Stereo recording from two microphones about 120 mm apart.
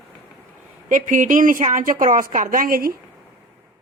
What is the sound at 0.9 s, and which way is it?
A woman's voice, 90° right.